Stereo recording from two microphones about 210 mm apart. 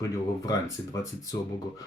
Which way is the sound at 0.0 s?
15° left (ahead or behind).